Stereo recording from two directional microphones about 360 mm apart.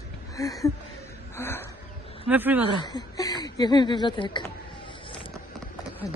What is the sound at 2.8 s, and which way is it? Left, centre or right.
Speech, centre.